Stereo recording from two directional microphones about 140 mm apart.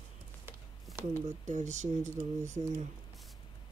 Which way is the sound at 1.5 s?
60° right (ahead or behind).